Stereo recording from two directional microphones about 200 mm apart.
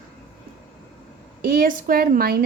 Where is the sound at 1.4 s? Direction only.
45° right (ahead or behind).